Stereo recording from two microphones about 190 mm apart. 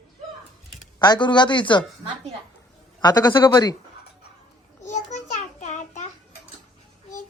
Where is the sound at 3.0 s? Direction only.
20° left (ahead or behind).